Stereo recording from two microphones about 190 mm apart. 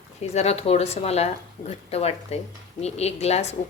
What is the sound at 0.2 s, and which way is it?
Speech, 35° left (ahead or behind).